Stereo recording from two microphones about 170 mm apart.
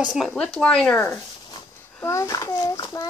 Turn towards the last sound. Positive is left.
turn(degrees=20)  # may be behind; listen again after turning